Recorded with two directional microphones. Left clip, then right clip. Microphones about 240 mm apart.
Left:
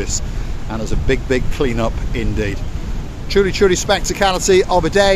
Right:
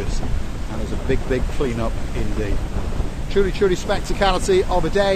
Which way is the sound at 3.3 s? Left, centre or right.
Left.